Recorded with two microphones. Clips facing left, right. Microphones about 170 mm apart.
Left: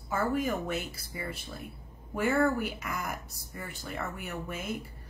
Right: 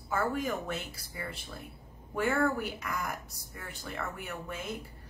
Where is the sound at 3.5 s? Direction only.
5° left (ahead or behind).